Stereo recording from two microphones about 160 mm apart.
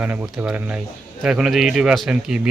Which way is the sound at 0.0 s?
10° right (ahead or behind).